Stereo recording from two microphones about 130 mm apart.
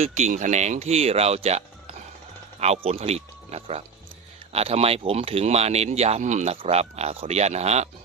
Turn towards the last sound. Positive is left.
turn(degrees=-55)  # may be behind; listen again after turning